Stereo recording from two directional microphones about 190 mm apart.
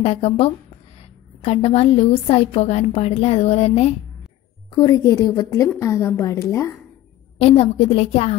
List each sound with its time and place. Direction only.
0.0 s a woman's voice: 30° left (ahead or behind)
4.7 s a woman's voice: 20° left (ahead or behind)
7.3 s a woman's voice: 30° left (ahead or behind)